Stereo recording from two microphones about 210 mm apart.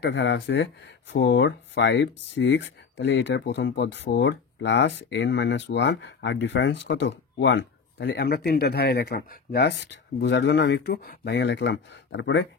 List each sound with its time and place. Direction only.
0.0 s speech: 55° left (ahead or behind)